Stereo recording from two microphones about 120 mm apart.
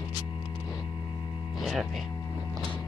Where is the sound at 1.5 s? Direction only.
Centre (ahead or behind).